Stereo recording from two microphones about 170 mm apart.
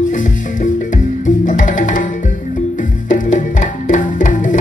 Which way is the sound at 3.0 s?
50° left (ahead or behind).